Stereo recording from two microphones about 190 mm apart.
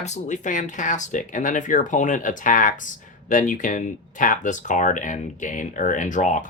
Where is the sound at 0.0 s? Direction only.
40° left (ahead or behind).